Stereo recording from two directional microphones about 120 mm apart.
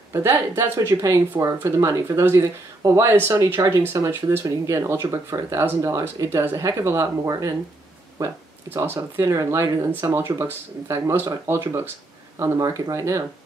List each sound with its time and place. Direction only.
0.1 s speech: 20° right (ahead or behind)